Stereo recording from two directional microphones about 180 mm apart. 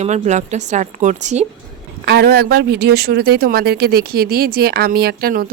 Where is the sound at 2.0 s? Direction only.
60° right (ahead or behind).